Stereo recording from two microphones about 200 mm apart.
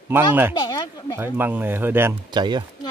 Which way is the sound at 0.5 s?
20° left (ahead or behind).